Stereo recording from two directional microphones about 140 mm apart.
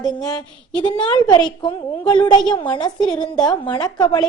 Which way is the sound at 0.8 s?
35° left (ahead or behind).